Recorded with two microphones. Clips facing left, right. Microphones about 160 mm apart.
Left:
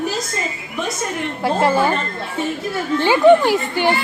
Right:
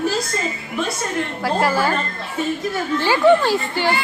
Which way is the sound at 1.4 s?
20° left (ahead or behind).